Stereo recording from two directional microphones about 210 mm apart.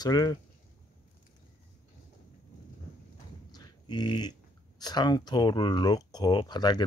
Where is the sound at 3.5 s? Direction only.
20° left (ahead or behind).